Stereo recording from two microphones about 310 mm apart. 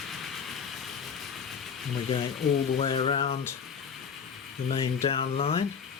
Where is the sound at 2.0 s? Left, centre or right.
Centre.